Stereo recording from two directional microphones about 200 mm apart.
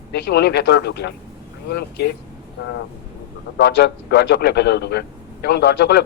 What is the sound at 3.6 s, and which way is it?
A man's voice, 55° left (ahead or behind).